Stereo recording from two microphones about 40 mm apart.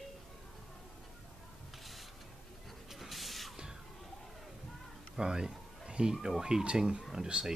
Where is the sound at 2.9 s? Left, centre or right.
Centre.